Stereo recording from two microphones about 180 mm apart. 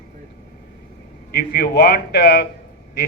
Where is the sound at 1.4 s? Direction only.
65° left (ahead or behind).